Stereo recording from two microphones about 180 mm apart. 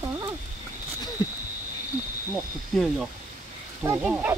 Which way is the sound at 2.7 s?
5° left (ahead or behind).